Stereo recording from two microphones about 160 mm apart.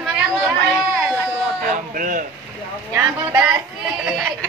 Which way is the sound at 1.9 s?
60° right (ahead or behind).